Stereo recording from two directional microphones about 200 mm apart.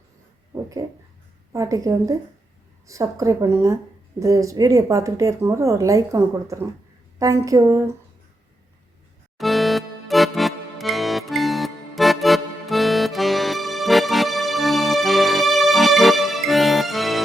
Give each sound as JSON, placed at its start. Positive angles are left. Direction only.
{"t": 0.5, "sound": "a sound", "side_deg": -15}
{"t": 1.5, "sound": "speech", "side_deg": -15}
{"t": 9.4, "sound": "music", "side_deg": 0}